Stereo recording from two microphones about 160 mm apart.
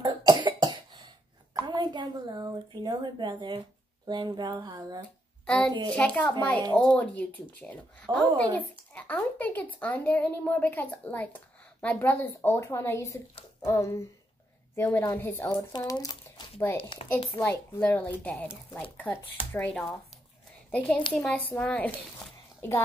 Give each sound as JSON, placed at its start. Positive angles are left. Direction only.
{"t": 0.0, "sound": "cough", "side_deg": -25}
{"t": 4.1, "sound": "speech", "side_deg": -25}
{"t": 5.4, "sound": "a child's voice", "side_deg": 5}
{"t": 17.4, "sound": "speech", "side_deg": 10}